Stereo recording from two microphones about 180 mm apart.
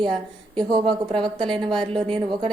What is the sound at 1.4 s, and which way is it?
Speech, 25° right (ahead or behind).